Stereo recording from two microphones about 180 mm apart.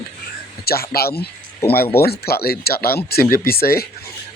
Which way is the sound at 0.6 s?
60° left (ahead or behind).